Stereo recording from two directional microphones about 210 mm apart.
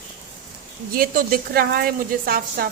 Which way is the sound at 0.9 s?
45° right (ahead or behind).